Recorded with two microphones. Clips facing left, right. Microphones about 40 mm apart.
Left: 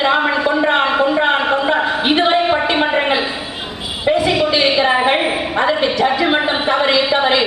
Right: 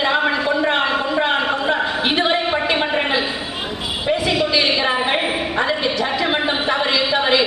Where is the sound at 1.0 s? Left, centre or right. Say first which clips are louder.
Left 4 dB; left.